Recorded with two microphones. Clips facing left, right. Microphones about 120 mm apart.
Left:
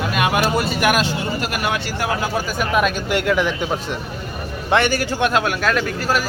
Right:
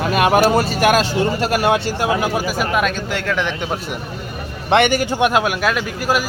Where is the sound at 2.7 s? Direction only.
5° left (ahead or behind).